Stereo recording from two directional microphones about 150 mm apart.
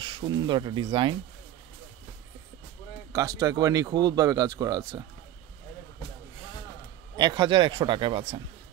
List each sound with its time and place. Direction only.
0.0 s speech: 30° right (ahead or behind)
3.1 s speech: 25° right (ahead or behind)
7.2 s speech: 30° right (ahead or behind)